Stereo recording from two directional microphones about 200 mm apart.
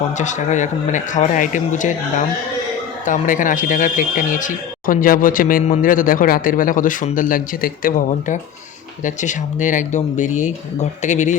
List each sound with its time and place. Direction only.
0.2 s speech: 35° left (ahead or behind)